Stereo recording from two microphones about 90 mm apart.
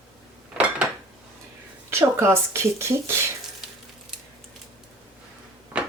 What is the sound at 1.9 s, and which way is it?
Speech, 30° right (ahead or behind).